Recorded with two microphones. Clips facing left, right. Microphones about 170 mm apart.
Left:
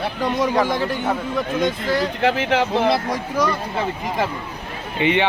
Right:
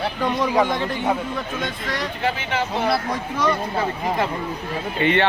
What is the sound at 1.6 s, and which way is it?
Speech, 30° left (ahead or behind).